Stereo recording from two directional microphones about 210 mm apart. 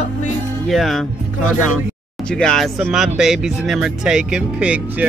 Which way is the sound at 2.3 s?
5° left (ahead or behind).